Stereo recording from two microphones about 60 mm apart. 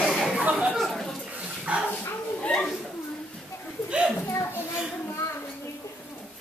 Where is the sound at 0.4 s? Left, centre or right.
Right.